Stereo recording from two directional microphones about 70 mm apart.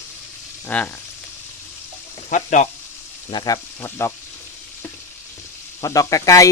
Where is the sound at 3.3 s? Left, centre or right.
Left.